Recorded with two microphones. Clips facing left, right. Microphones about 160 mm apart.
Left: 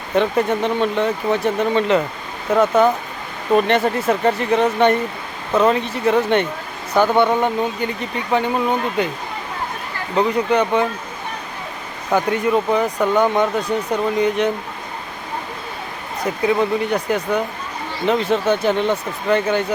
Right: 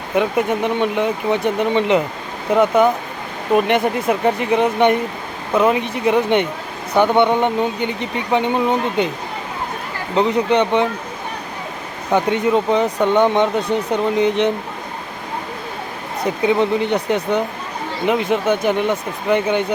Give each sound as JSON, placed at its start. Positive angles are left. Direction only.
{"t": 0.2, "sound": "speech", "side_deg": -10}
{"t": 10.2, "sound": "speech", "side_deg": -20}
{"t": 12.1, "sound": "speech", "side_deg": -20}
{"t": 16.2, "sound": "speech", "side_deg": -20}